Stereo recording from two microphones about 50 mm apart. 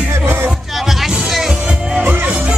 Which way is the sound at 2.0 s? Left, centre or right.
Right.